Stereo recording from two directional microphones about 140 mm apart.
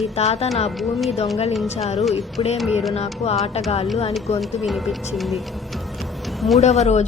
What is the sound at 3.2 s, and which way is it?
Speech, 50° left (ahead or behind).